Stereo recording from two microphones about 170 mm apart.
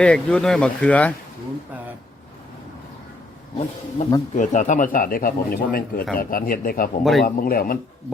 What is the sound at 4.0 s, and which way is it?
Speech, 45° left (ahead or behind).